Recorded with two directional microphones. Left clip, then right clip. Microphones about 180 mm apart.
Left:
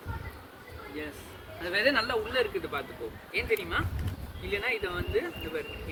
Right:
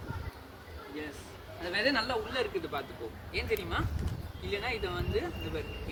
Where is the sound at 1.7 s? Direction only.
55° right (ahead or behind).